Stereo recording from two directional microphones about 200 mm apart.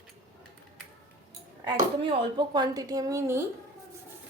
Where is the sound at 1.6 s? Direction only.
25° right (ahead or behind).